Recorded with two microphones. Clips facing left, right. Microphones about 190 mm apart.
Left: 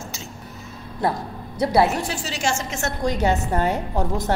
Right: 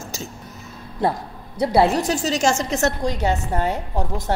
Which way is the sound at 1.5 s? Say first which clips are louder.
Right 2 dB; 30° right (ahead or behind).